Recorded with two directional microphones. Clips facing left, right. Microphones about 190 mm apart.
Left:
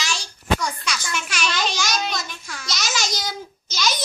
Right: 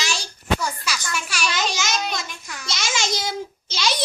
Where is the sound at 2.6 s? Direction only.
25° right (ahead or behind).